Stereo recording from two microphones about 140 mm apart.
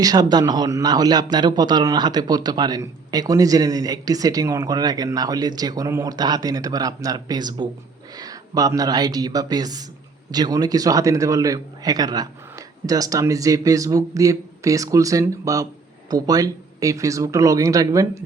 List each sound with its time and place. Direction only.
0.0 s speech: 30° right (ahead or behind)